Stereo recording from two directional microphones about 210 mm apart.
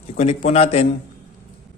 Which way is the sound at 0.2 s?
30° left (ahead or behind).